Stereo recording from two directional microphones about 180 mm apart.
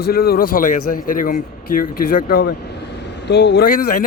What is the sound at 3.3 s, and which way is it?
Speech, 70° left (ahead or behind).